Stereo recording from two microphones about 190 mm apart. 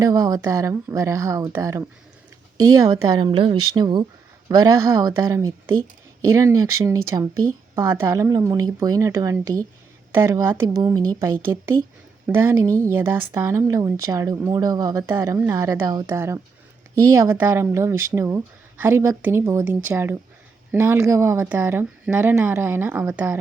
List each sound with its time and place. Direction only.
0.0 s speech: 20° right (ahead or behind)